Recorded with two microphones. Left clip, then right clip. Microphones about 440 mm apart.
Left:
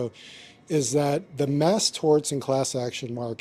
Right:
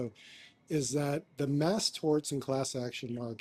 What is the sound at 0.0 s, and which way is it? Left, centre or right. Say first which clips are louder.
Speech: left 9 dB; left.